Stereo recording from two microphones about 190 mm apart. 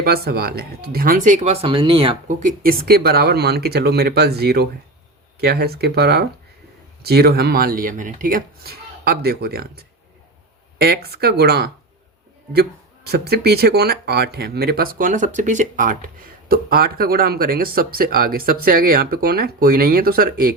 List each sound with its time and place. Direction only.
0.0 s speech: 55° right (ahead or behind); by 2.1 s 25° right (ahead or behind)
2.2 s speech: 45° right (ahead or behind)
10.8 s speech: 55° right (ahead or behind)
13.1 s speech: 55° right (ahead or behind)